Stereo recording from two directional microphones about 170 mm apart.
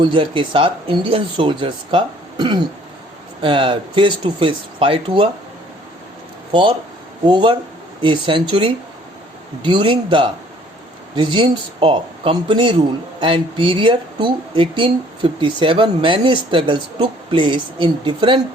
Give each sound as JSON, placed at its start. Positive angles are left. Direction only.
{"t": 0.0, "sound": "speech", "side_deg": -30}
{"t": 6.5, "sound": "speech", "side_deg": -30}